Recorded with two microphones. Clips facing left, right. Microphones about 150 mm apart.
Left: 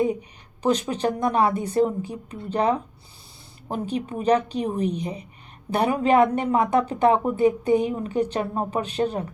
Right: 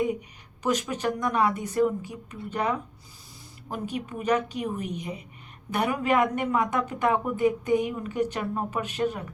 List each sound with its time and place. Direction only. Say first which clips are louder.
0.0 s speech: left 4 dB; 30° left (ahead or behind)